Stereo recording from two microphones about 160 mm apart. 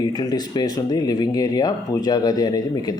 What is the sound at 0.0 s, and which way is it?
Speech, 25° left (ahead or behind).